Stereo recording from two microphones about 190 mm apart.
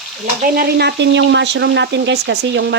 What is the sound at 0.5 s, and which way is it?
Speech, 55° right (ahead or behind).